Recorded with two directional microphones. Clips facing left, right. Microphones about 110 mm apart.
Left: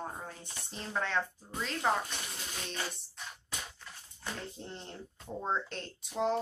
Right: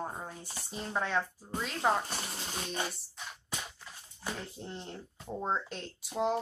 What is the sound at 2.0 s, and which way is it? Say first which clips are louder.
Speech: right 3 dB; 35° right (ahead or behind).